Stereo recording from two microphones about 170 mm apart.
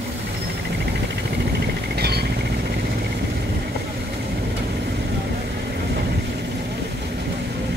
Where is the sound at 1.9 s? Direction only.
70° right (ahead or behind).